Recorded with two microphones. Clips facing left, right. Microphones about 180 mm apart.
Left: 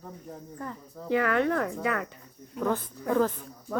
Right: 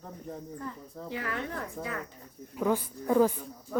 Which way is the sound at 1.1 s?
65° left (ahead or behind).